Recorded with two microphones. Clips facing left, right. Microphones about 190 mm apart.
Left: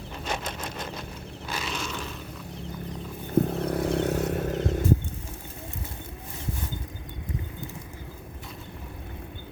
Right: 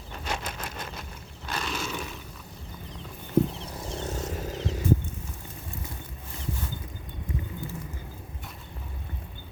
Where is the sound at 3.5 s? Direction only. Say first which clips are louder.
Left 11 dB; 60° left (ahead or behind).